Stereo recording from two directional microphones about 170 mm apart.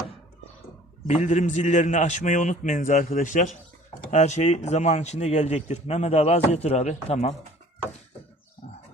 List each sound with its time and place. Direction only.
1.0 s a man's voice: 40° left (ahead or behind)